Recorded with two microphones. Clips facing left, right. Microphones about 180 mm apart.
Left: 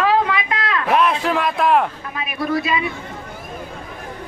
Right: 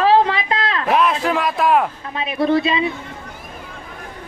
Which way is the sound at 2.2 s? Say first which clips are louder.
Right 5 dB; 25° right (ahead or behind).